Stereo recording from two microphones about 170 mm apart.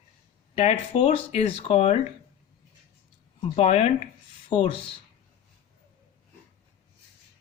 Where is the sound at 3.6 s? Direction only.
40° left (ahead or behind).